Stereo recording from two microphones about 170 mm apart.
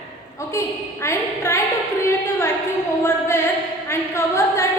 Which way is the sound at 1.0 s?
15° left (ahead or behind).